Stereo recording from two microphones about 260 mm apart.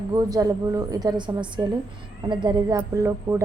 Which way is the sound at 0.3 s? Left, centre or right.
Centre.